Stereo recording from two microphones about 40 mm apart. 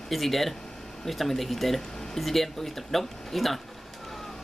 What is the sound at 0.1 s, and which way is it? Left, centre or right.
Speech, centre.